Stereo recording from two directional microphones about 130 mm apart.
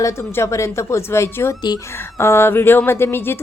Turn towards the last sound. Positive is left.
turn(degrees=15)  # may be behind; listen again after turning